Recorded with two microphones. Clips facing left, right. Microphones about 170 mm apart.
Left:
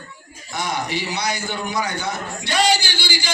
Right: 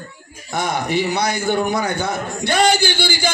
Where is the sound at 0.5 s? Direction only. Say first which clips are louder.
Right 5 dB; 55° right (ahead or behind).